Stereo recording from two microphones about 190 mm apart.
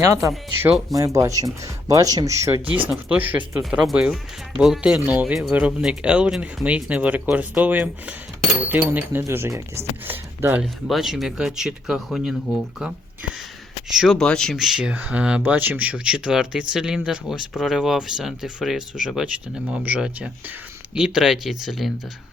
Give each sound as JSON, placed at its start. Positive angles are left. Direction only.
{"t": 0.0, "sound": "speech", "side_deg": -15}
{"t": 13.9, "sound": "speech", "side_deg": 0}